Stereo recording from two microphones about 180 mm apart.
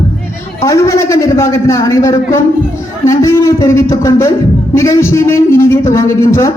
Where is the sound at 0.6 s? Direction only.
15° left (ahead or behind).